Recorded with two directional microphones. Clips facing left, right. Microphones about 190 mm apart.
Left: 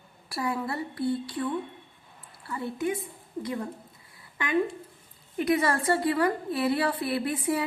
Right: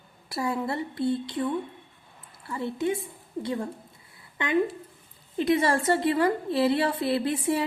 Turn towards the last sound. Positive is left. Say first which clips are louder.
# right 2 dB
turn(degrees=-25)  # may be behind; listen again after turning